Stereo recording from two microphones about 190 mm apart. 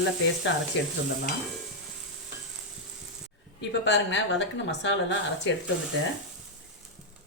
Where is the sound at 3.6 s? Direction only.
70° left (ahead or behind).